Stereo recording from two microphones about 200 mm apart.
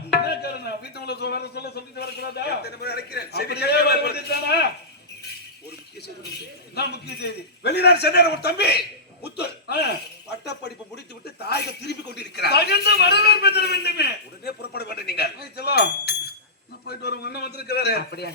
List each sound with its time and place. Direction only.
0.1 s speech: 55° left (ahead or behind)
6.7 s speech: 55° left (ahead or behind)